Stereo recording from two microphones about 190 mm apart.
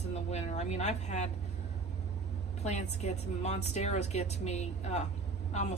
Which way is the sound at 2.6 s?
35° left (ahead or behind).